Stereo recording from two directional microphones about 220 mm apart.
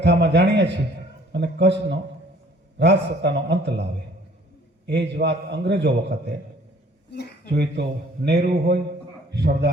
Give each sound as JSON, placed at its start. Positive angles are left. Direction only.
{"t": 0.0, "sound": "a man's voice", "side_deg": -50}
{"t": 4.9, "sound": "a man's voice", "side_deg": -50}
{"t": 7.1, "sound": "a sound", "side_deg": 45}
{"t": 7.4, "sound": "a man's voice", "side_deg": -50}